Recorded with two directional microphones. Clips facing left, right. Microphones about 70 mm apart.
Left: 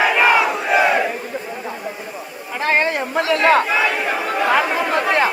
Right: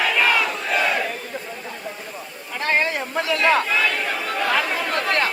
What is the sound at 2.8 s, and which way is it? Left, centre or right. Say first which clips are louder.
Chatter: left 4 dB; left.